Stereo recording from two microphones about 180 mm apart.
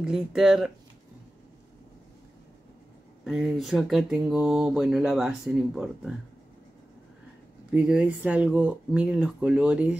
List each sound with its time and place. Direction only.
0.0 s speech: 5° right (ahead or behind)
3.3 s speech: centre (ahead or behind)
7.7 s speech: 5° right (ahead or behind)